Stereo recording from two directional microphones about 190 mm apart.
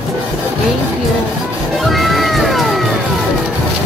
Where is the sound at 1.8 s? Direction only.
Centre (ahead or behind).